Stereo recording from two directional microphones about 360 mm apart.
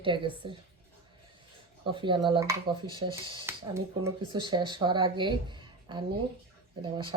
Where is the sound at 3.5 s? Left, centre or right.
Centre.